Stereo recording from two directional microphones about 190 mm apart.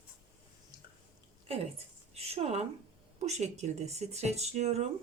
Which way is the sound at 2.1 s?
35° right (ahead or behind).